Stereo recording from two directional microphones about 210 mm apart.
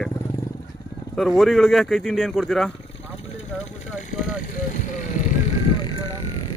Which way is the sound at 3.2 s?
30° left (ahead or behind).